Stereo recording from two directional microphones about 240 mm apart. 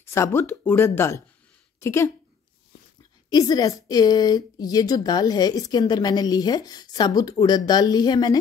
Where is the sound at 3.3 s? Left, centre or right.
Centre.